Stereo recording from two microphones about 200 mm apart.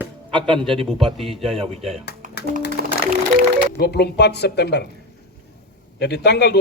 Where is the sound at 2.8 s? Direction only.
50° right (ahead or behind).